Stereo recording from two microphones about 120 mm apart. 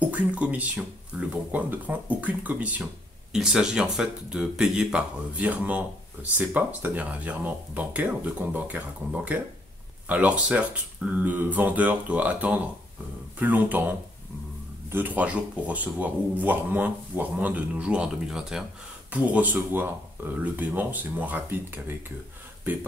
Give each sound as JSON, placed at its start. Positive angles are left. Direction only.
{"t": 0.0, "sound": "speech", "side_deg": -10}